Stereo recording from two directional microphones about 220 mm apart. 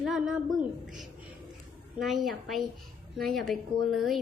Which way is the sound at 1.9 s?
Centre (ahead or behind).